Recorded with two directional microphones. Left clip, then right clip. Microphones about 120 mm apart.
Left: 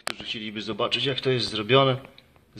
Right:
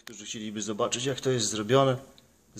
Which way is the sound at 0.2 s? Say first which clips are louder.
Left 5 dB; 15° right (ahead or behind).